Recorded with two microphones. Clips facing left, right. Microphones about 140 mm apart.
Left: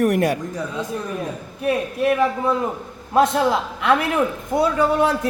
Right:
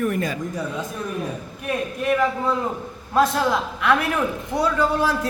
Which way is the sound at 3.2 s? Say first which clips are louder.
Left 2 dB; 25° left (ahead or behind).